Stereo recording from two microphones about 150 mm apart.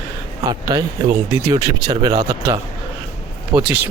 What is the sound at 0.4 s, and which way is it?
Speech, 25° right (ahead or behind).